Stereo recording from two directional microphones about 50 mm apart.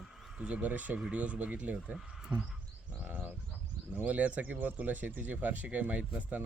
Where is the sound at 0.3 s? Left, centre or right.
Right.